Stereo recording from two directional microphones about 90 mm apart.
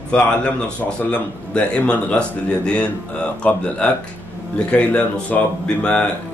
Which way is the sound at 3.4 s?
20° left (ahead or behind).